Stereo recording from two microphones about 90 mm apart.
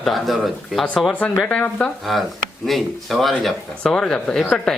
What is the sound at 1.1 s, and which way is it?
Speech, 20° left (ahead or behind).